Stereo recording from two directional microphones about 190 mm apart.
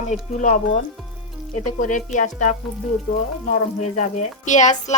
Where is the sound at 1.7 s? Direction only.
40° left (ahead or behind).